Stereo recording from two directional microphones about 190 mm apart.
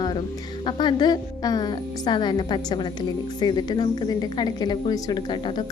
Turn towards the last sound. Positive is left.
turn(degrees=25)  # may be behind; listen again after turning